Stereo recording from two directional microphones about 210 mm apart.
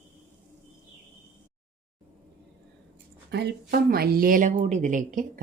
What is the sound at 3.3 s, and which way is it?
A woman's voice, 50° right (ahead or behind).